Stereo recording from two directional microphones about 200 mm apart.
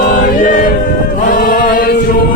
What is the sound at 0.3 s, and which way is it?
Choir, 40° left (ahead or behind).